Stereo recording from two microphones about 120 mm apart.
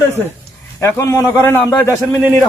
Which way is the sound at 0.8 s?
25° left (ahead or behind).